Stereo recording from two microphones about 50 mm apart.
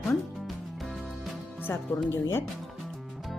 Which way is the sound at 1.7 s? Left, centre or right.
Left.